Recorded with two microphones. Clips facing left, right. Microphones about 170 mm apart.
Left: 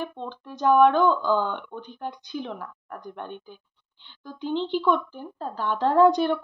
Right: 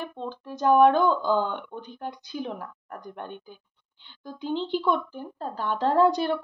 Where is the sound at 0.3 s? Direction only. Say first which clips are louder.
Even; 40° right (ahead or behind).